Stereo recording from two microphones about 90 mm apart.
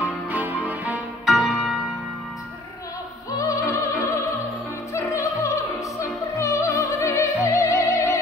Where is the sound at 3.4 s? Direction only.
40° left (ahead or behind).